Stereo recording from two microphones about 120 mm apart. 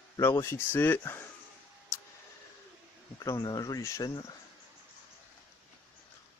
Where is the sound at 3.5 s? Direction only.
30° left (ahead or behind).